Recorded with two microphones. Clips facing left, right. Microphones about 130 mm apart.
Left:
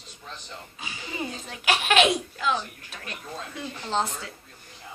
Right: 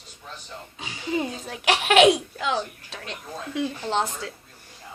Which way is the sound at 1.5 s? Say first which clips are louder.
Right 2 dB; 75° right (ahead or behind).